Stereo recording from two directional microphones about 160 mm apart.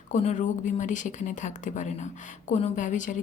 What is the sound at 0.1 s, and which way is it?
A woman's voice, 45° left (ahead or behind).